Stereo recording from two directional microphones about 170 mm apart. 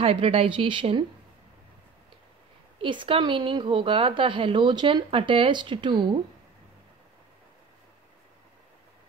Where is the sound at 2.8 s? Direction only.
30° right (ahead or behind).